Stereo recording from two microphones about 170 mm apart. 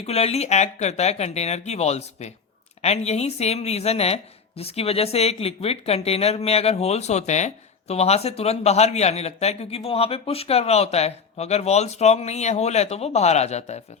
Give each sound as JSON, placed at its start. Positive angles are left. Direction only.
{"t": 0.0, "sound": "a woman's voice", "side_deg": 35}